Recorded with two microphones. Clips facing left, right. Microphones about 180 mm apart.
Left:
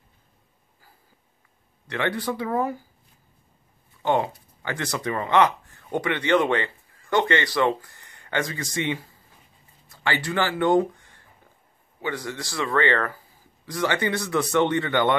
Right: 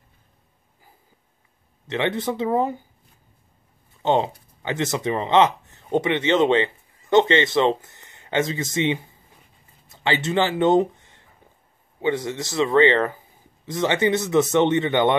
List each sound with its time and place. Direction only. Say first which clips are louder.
1.9 s a man's voice: right 3 dB; 20° right (ahead or behind)
4.0 s a man's voice: right 3 dB; 20° right (ahead or behind)